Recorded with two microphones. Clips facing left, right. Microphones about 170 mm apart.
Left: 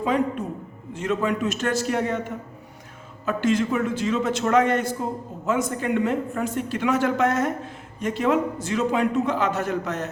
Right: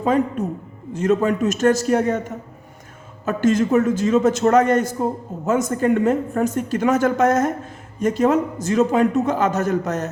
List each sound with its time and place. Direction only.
0.0 s a man's voice: 45° right (ahead or behind)